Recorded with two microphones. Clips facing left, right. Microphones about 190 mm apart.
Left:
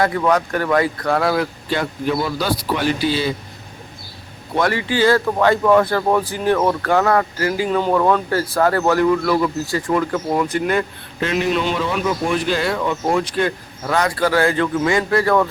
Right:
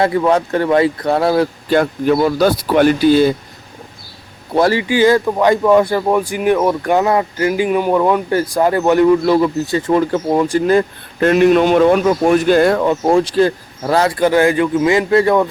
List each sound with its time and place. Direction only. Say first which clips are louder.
0.0 s speech: right 4 dB; 25° right (ahead or behind)
1.7 s speech: right 7 dB; 50° right (ahead or behind)
4.5 s speech: right 6 dB; 30° right (ahead or behind)
4.9 s speech: right 4 dB; 15° right (ahead or behind)
11.2 s speech: right 9 dB; 55° right (ahead or behind); by 14.1 s 35° right (ahead or behind)
14.2 s speech: right 4 dB; 20° right (ahead or behind)